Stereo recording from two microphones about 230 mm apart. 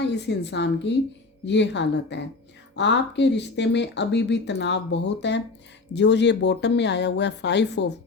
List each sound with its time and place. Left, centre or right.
0.0 s speech: left